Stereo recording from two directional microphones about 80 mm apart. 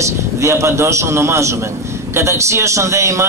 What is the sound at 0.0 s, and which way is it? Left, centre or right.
A man's voice, right.